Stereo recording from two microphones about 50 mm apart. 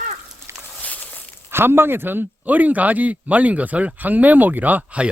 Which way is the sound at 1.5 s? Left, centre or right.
Right.